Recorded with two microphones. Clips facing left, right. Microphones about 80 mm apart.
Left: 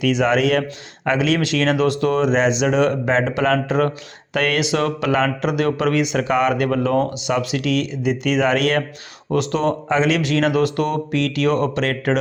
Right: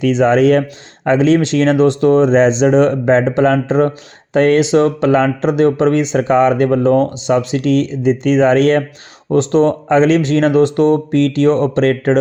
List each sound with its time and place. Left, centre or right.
0.0 s speech: right